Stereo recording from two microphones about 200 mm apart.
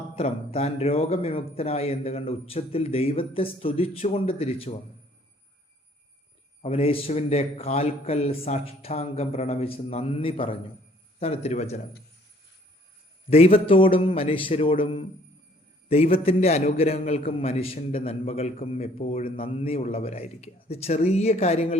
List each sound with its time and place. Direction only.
0.2 s a man's voice: 30° left (ahead or behind)
6.6 s a man's voice: 30° left (ahead or behind)
13.3 s a man's voice: 30° left (ahead or behind)